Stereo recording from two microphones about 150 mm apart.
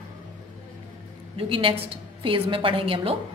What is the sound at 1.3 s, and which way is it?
A woman's voice, 35° right (ahead or behind).